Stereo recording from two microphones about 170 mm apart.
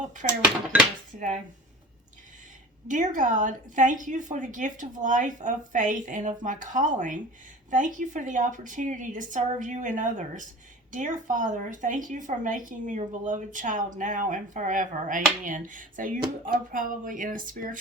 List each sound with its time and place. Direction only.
0.2 s a woman's voice: 45° right (ahead or behind)
2.8 s a woman's voice: 50° right (ahead or behind)